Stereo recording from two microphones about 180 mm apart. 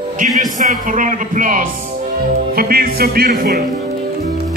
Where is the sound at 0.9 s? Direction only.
45° right (ahead or behind).